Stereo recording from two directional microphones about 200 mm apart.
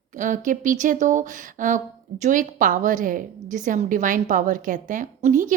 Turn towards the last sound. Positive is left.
turn(degrees=-40)  # may be behind; listen again after turning